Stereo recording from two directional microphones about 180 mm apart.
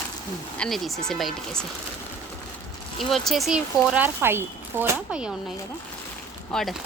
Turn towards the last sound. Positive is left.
turn(degrees=0)  # may be behind; listen again after turning